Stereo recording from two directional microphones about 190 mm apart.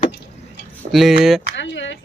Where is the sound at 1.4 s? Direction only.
75° left (ahead or behind).